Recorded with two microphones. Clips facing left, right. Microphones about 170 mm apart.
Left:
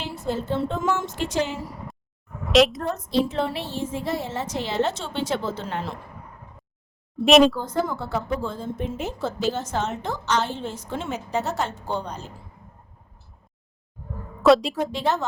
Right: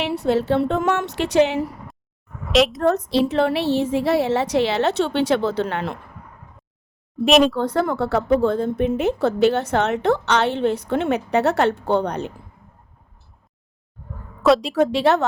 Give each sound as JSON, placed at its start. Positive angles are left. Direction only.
{"t": 0.0, "sound": "a woman's voice", "side_deg": -70}
{"t": 2.5, "sound": "a woman's voice", "side_deg": 0}
{"t": 2.8, "sound": "a woman's voice", "side_deg": -70}
{"t": 7.3, "sound": "a woman's voice", "side_deg": 0}
{"t": 7.6, "sound": "a woman's voice", "side_deg": -65}
{"t": 14.4, "sound": "a woman's voice", "side_deg": 0}
{"t": 14.8, "sound": "a woman's voice", "side_deg": -70}